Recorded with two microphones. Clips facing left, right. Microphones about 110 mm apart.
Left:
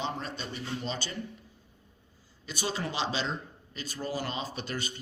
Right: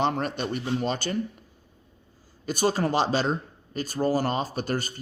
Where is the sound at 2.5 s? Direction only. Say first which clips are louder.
Right 10 dB; 45° right (ahead or behind).